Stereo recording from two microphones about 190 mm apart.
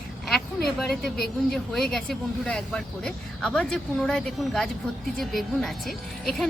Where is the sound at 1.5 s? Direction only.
Centre (ahead or behind).